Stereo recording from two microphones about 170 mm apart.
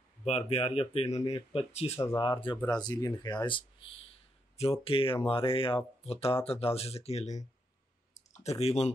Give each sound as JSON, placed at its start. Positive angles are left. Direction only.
{"t": 0.2, "sound": "speech", "side_deg": 35}
{"t": 8.5, "sound": "speech", "side_deg": 40}